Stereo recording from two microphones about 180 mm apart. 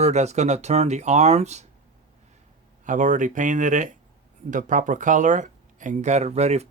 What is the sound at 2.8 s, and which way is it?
Speech, 45° right (ahead or behind).